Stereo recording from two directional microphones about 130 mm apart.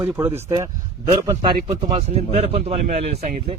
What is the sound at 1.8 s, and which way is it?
A man's voice, 50° right (ahead or behind).